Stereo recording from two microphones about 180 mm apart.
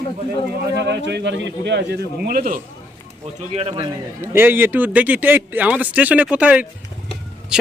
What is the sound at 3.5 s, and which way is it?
Speech, 30° right (ahead or behind).